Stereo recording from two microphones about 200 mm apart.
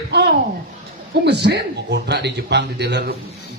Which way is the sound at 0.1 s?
55° right (ahead or behind).